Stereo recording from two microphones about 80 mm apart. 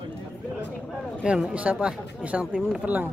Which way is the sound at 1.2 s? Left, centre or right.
Centre.